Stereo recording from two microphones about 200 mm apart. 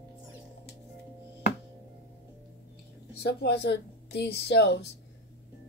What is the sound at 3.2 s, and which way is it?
A woman's voice, 55° left (ahead or behind).